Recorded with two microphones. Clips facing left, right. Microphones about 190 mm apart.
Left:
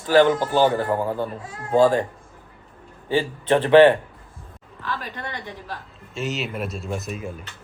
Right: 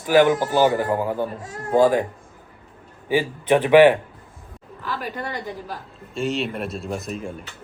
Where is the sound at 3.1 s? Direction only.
15° right (ahead or behind).